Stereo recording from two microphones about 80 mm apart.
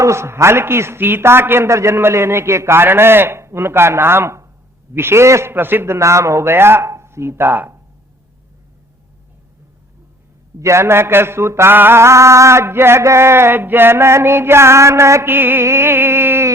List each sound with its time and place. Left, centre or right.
0.0 s mantra: right
10.6 s mantra: right